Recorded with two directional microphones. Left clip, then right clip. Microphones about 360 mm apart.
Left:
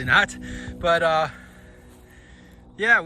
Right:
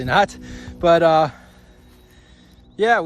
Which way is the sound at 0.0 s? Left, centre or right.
Centre.